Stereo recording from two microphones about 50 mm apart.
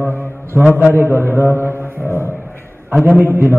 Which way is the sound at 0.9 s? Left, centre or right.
Right.